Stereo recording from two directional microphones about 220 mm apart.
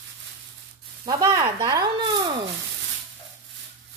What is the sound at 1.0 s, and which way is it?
Speech, 15° right (ahead or behind).